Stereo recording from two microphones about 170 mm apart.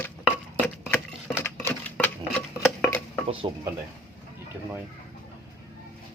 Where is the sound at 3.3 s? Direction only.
30° right (ahead or behind).